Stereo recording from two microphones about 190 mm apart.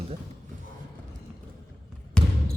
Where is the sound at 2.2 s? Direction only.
5° left (ahead or behind).